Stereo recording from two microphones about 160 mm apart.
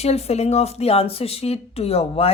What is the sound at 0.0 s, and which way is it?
Speech, 40° left (ahead or behind).